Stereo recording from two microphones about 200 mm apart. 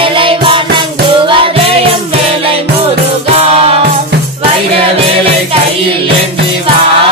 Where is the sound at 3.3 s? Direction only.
30° right (ahead or behind).